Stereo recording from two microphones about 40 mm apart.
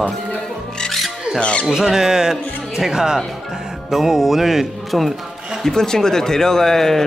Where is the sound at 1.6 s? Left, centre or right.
Centre.